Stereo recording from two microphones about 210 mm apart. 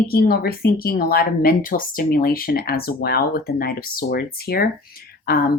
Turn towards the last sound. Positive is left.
turn(degrees=45)  # may be behind; listen again after turning